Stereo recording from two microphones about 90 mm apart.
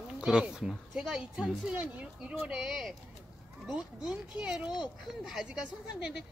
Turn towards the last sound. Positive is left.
turn(degrees=-5)  # may be behind; listen again after turning